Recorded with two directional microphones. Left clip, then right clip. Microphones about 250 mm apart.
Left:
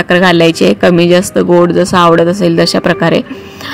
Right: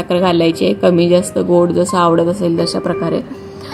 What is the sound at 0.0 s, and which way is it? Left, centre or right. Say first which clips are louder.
Speech: left 6 dB; left.